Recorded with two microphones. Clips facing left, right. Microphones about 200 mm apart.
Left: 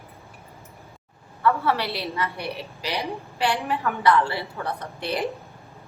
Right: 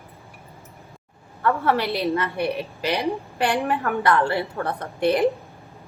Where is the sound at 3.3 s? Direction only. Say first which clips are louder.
Right 1 dB; 50° right (ahead or behind).